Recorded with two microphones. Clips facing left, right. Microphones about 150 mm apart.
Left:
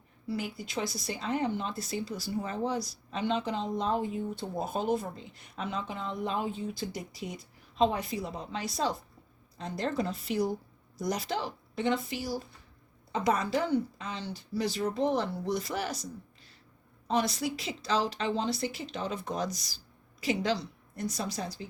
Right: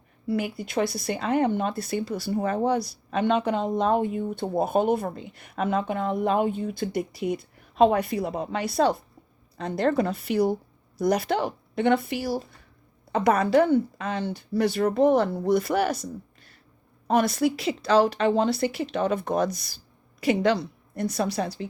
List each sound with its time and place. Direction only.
0.3 s speech: 60° right (ahead or behind)